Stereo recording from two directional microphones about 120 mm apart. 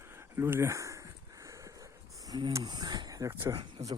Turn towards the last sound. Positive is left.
turn(degrees=-30)  # may be behind; listen again after turning